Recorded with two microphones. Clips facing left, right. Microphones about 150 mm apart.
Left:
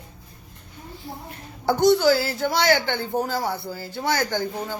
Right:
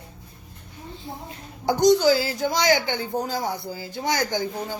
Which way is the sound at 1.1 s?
20° right (ahead or behind).